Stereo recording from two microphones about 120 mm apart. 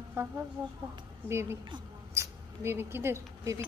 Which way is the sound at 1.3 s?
20° right (ahead or behind).